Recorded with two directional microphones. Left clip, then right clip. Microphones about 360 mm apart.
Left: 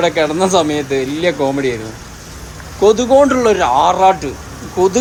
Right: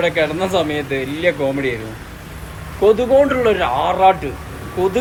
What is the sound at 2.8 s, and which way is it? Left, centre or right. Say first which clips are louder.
Speech: left 3 dB; centre.